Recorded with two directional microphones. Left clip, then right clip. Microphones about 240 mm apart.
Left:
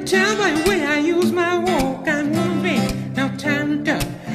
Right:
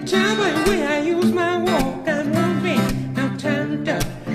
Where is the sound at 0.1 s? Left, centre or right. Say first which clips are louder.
Left 2 dB; centre.